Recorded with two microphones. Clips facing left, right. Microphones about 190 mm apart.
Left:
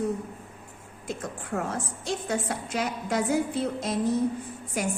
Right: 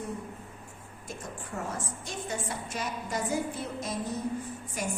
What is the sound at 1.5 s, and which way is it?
A woman's voice, 75° left (ahead or behind).